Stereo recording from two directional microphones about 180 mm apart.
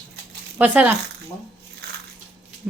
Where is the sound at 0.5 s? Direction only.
5° right (ahead or behind).